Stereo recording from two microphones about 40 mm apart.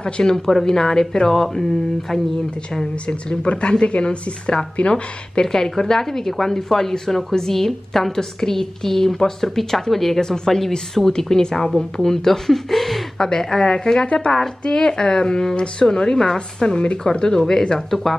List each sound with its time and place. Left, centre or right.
0.0 s a woman's voice: centre
3.1 s speech: left
5.4 s a woman's voice: centre